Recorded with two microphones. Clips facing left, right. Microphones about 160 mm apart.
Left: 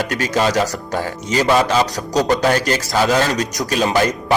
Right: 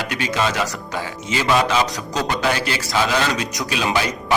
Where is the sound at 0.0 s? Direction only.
45° left (ahead or behind).